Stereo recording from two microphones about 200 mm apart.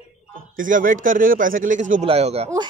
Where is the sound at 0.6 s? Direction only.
40° right (ahead or behind).